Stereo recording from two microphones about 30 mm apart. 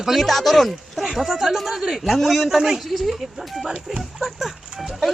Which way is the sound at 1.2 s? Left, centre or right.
Centre.